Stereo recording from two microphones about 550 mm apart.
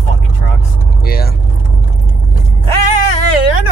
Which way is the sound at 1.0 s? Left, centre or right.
Centre.